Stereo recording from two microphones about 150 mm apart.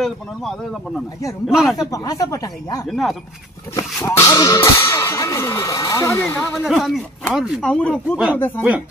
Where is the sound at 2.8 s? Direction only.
Centre (ahead or behind).